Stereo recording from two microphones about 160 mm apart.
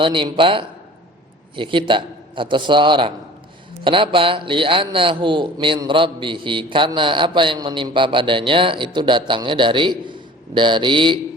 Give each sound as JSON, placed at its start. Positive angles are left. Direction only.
{"t": 0.0, "sound": "a man's voice", "side_deg": -30}